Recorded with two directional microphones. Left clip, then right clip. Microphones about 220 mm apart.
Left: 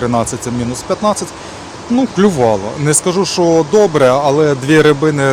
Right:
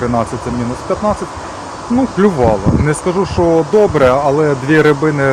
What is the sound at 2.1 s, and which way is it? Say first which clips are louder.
Speech: even; 20° left (ahead or behind).